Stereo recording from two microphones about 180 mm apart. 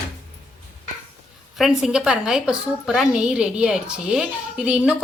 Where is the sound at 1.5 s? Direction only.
Centre (ahead or behind).